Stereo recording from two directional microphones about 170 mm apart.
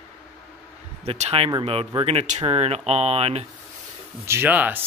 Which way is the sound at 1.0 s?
40° right (ahead or behind).